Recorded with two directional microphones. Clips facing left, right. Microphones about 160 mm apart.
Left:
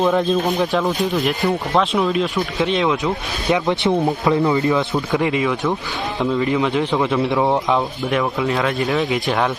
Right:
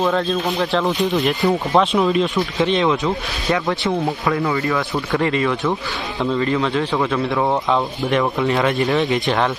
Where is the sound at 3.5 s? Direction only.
20° left (ahead or behind).